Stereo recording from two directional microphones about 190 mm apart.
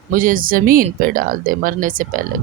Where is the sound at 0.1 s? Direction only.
45° right (ahead or behind).